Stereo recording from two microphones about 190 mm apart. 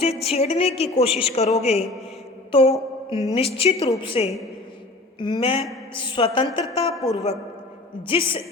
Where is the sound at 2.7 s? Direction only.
25° left (ahead or behind).